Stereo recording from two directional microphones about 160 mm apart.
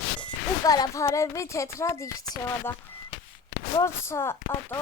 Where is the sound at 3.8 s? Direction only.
15° left (ahead or behind).